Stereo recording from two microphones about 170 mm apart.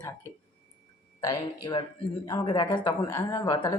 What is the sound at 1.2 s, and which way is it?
A woman's voice, 25° left (ahead or behind).